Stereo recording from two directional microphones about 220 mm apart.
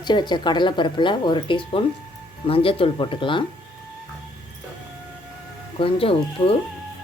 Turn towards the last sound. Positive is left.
turn(degrees=25)  # may be behind; listen again after turning